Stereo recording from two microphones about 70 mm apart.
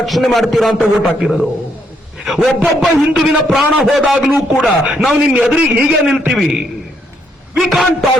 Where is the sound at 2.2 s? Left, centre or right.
Centre.